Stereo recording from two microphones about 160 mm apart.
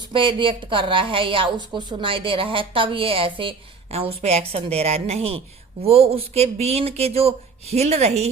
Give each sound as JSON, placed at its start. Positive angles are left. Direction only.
{"t": 0.1, "sound": "a woman's voice", "side_deg": -30}